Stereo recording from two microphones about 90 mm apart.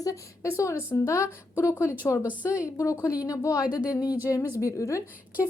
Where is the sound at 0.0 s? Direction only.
35° left (ahead or behind).